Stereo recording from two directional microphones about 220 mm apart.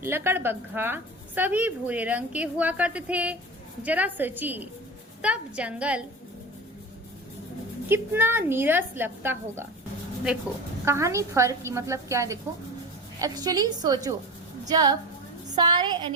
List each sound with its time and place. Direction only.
0.0 s a woman's voice: 10° right (ahead or behind)
7.9 s a woman's voice: 10° right (ahead or behind)
10.8 s a woman's voice: 10° right (ahead or behind)